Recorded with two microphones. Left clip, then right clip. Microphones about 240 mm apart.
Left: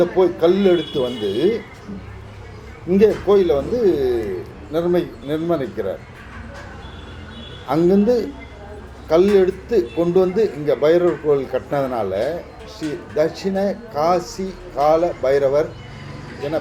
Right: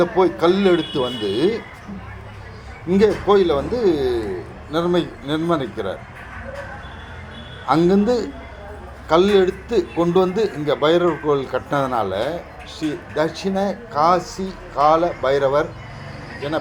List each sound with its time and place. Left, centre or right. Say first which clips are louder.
0.0 s a man's voice: left 1 dB; right
2.9 s a man's voice: left 1 dB; right
7.7 s a man's voice: even; right